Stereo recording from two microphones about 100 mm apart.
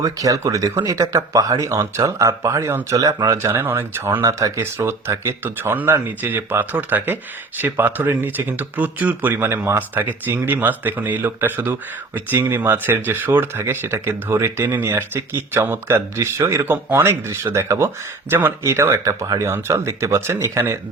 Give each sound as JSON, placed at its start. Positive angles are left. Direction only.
{"t": 0.0, "sound": "speech", "side_deg": -35}